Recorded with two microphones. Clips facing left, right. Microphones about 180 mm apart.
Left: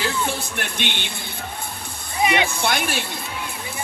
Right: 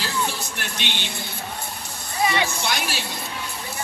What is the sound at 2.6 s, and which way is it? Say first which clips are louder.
Speech: left 4 dB; 55° left (ahead or behind).